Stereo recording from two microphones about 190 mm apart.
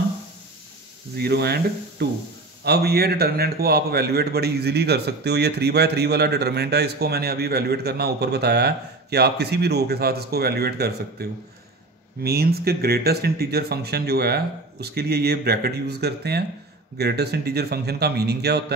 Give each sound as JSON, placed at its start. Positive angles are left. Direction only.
{"t": 1.1, "sound": "a man's voice", "side_deg": -60}